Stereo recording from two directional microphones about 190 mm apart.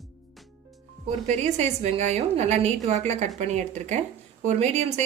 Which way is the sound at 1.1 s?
35° right (ahead or behind).